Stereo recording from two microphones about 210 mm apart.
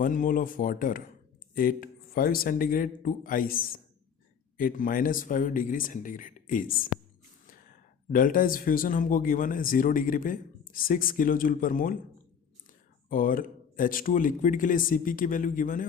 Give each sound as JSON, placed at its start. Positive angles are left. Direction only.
{"t": 0.0, "sound": "speech", "side_deg": 40}
{"t": 8.1, "sound": "speech", "side_deg": 40}
{"t": 13.1, "sound": "speech", "side_deg": 40}